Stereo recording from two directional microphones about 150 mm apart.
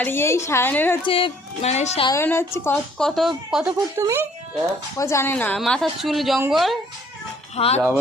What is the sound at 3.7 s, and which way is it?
Speech, 20° right (ahead or behind).